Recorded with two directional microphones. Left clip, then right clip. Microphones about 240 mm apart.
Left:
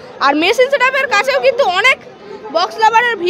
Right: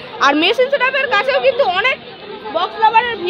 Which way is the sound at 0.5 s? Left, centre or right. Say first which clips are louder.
Left 3 dB; left.